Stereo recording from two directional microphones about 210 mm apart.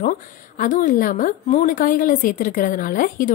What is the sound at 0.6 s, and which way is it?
A woman's voice, 40° left (ahead or behind).